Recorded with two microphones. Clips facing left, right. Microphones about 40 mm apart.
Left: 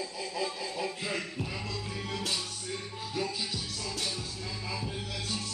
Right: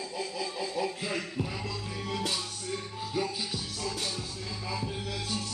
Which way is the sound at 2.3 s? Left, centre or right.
Centre.